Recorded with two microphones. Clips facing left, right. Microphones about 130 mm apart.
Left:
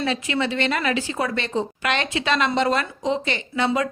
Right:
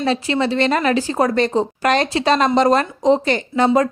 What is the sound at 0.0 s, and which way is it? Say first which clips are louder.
Speech: right 5 dB; 35° right (ahead or behind).